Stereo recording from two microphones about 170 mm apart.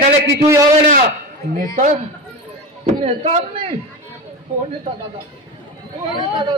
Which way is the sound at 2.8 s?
40° right (ahead or behind).